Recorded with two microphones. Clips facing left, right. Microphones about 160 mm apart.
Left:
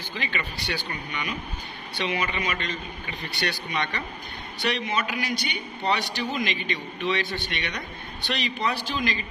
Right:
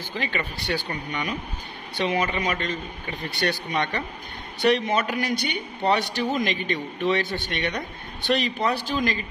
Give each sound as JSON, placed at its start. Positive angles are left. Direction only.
{"t": 0.2, "sound": "a man's voice", "side_deg": -45}